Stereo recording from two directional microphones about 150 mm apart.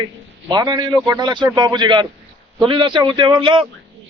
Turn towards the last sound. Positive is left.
turn(degrees=-30)  # may be behind; listen again after turning